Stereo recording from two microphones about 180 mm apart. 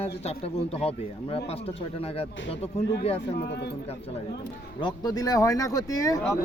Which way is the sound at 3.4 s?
70° left (ahead or behind).